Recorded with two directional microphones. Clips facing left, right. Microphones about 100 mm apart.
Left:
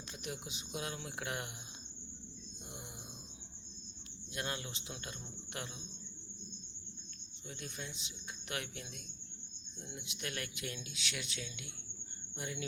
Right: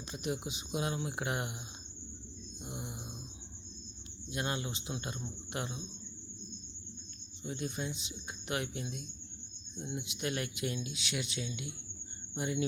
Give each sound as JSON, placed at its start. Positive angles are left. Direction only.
{"t": 0.1, "sound": "speech", "side_deg": -20}
{"t": 2.6, "sound": "speech", "side_deg": -15}
{"t": 4.3, "sound": "speech", "side_deg": -20}
{"t": 7.4, "sound": "speech", "side_deg": -20}